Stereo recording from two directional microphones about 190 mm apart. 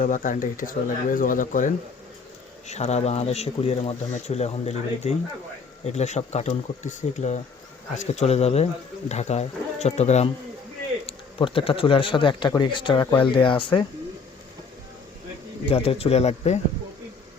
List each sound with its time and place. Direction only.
0.0 s speech: 45° left (ahead or behind); by 13.8 s 25° left (ahead or behind)
15.7 s speech: 30° left (ahead or behind)